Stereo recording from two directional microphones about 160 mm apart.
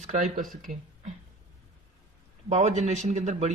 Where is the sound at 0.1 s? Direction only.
50° right (ahead or behind).